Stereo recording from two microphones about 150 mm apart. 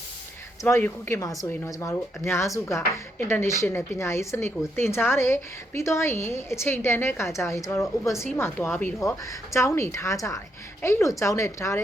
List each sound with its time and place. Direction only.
0.6 s a woman's voice: 15° left (ahead or behind)